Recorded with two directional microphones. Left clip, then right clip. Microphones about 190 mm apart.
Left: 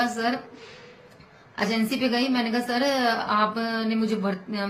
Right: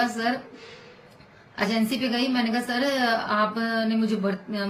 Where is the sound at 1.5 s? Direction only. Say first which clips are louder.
Even; 20° left (ahead or behind).